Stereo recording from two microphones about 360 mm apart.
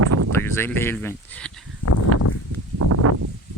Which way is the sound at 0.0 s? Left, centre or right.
Right.